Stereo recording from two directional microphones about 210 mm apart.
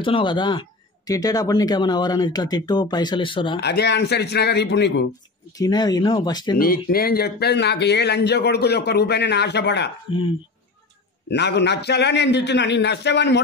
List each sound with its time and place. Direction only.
0.0 s a man's voice: 25° left (ahead or behind)
3.6 s a man's voice: 55° left (ahead or behind)
5.6 s a man's voice: 20° left (ahead or behind)
6.6 s a man's voice: 45° left (ahead or behind)
10.1 s a man's voice: 25° left (ahead or behind)
11.2 s a man's voice: 55° left (ahead or behind)